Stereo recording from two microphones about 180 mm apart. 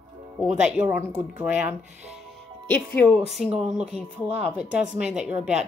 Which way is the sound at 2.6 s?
10° left (ahead or behind).